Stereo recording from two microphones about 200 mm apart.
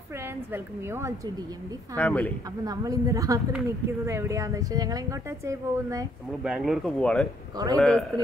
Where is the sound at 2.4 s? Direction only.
20° right (ahead or behind).